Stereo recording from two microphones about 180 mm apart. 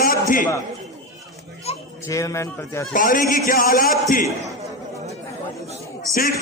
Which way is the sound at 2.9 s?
50° left (ahead or behind).